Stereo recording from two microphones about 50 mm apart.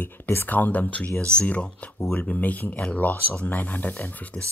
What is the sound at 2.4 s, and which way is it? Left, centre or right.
Speech, left.